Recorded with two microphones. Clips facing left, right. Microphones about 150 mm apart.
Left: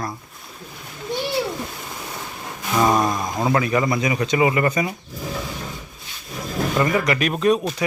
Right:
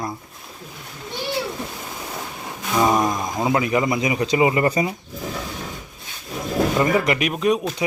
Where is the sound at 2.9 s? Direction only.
20° right (ahead or behind).